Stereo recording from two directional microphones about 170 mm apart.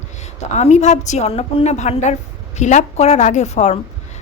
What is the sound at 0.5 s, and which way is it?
A woman's voice, 40° left (ahead or behind).